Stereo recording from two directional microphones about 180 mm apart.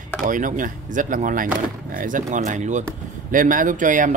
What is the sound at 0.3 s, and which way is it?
Speech, 45° right (ahead or behind).